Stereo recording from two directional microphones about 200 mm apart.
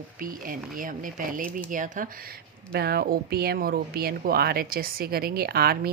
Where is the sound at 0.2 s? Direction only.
45° right (ahead or behind).